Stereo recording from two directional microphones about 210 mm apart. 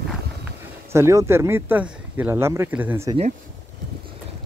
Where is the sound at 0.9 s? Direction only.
15° right (ahead or behind).